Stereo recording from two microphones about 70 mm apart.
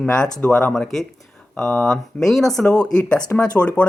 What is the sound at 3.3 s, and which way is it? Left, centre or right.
Speech, left.